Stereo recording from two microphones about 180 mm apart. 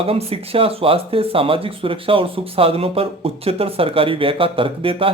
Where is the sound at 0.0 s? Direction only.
35° right (ahead or behind).